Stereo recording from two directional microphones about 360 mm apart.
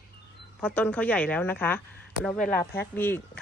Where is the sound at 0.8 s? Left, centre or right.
Centre.